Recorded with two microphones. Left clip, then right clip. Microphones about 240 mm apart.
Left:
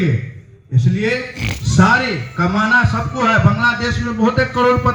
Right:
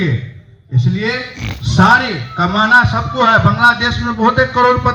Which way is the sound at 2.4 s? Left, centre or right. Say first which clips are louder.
Right 4 dB; left.